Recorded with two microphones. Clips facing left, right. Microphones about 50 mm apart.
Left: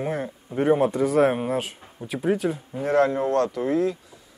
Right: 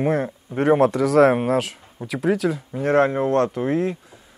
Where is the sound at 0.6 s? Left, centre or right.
Right.